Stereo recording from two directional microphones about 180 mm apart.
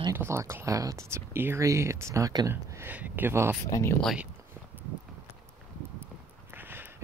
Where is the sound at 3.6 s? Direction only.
15° left (ahead or behind).